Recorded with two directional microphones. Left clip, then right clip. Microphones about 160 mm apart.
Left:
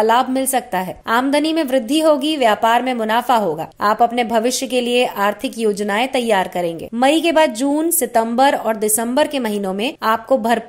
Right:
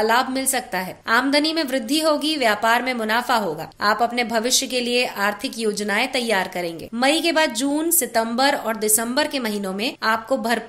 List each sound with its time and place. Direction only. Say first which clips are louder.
0.0 s a woman's voice: left 4 dB; 40° left (ahead or behind)